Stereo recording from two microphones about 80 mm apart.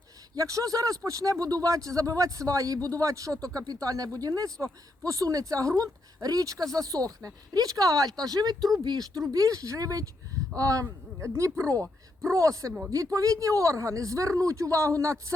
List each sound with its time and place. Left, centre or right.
0.3 s speech: right
9.3 s speech: right